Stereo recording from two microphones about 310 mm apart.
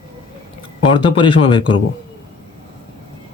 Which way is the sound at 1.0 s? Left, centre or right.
Centre.